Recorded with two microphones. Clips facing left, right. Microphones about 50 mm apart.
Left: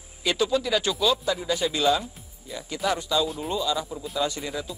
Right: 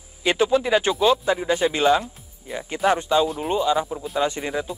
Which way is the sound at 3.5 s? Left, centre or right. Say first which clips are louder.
Right 6 dB; right.